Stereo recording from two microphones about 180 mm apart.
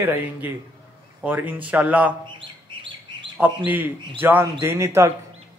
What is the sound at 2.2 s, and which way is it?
Bird, 25° right (ahead or behind).